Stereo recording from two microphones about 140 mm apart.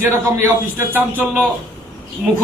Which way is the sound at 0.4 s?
15° right (ahead or behind).